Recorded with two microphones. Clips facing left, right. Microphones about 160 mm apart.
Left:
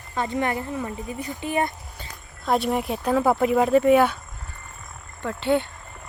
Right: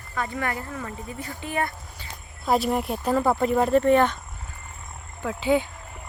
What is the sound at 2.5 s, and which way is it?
Speech, centre (ahead or behind).